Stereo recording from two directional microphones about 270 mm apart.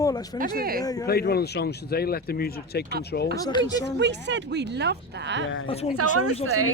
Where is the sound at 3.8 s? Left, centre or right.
Right.